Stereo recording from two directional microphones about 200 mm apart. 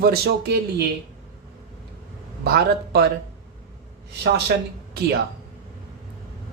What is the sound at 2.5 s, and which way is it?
Speech, 50° right (ahead or behind).